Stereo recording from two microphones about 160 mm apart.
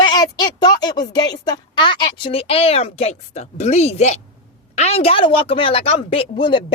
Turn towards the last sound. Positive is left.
turn(degrees=30)  # may be behind; listen again after turning